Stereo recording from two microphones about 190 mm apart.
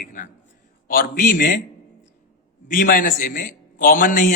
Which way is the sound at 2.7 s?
45° left (ahead or behind).